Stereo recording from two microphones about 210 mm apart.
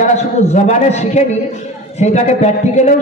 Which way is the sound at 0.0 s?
35° left (ahead or behind).